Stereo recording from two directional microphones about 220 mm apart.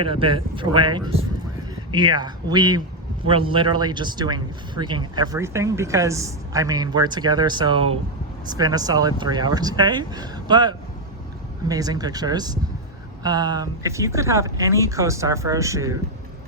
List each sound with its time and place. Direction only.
0.0 s speech: 25° right (ahead or behind)